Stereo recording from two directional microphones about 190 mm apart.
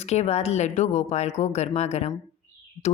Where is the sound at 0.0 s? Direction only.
35° left (ahead or behind).